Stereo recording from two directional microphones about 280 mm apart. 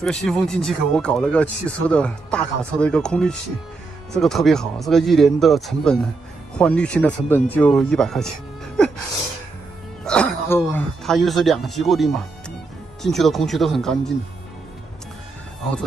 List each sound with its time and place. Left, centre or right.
0.0 s speech: centre
10.0 s speech: centre